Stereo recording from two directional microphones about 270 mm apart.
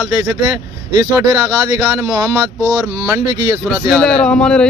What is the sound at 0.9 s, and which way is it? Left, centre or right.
Speech, centre.